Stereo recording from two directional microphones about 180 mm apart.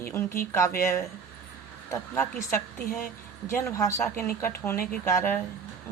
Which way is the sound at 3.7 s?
20° left (ahead or behind).